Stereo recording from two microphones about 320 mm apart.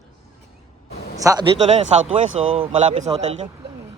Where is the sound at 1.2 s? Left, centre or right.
Centre.